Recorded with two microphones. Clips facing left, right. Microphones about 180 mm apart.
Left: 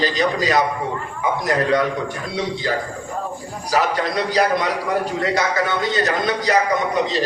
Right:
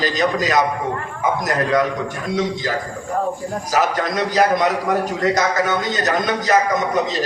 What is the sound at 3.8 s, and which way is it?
A man's voice, 45° right (ahead or behind).